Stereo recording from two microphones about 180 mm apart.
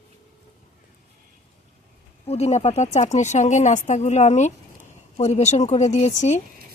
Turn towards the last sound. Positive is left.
turn(degrees=40)  # may be behind; listen again after turning